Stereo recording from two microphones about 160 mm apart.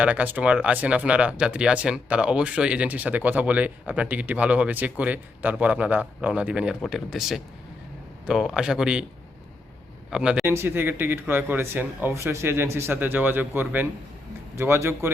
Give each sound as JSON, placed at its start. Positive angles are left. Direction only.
{"t": 0.0, "sound": "speech", "side_deg": -10}
{"t": 10.1, "sound": "speech", "side_deg": -5}